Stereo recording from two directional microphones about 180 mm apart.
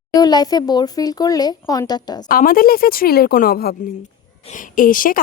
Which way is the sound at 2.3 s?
55° left (ahead or behind).